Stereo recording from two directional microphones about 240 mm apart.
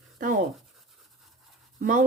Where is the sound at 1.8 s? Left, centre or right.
Right.